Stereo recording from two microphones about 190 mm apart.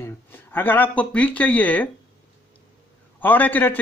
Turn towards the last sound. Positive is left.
turn(degrees=10)  # may be behind; listen again after turning